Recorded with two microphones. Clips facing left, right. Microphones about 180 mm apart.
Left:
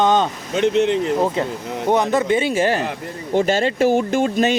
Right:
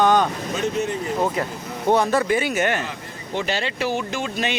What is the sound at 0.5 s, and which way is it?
Speech, 75° left (ahead or behind).